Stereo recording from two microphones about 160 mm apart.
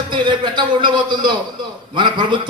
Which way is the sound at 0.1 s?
30° right (ahead or behind).